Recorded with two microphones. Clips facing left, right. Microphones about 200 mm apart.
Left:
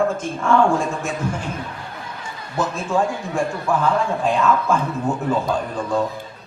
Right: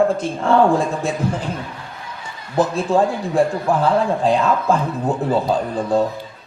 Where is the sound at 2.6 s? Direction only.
35° right (ahead or behind).